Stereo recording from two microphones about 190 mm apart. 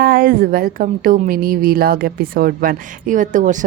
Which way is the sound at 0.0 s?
50° right (ahead or behind).